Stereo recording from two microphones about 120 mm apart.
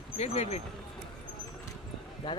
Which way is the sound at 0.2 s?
65° left (ahead or behind).